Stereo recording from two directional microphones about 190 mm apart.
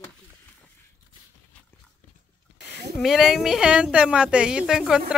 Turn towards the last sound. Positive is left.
turn(degrees=0)  # may be behind; listen again after turning